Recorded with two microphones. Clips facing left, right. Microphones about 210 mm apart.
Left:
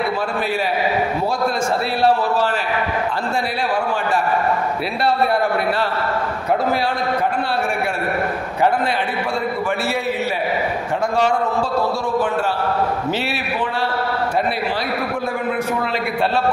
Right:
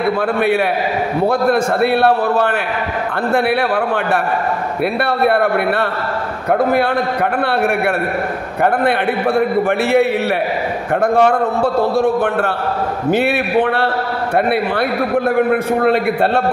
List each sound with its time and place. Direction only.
1.2 s a man's voice: 60° right (ahead or behind)
8.6 s a man's voice: 60° right (ahead or behind)
11.1 s a man's voice: 60° right (ahead or behind)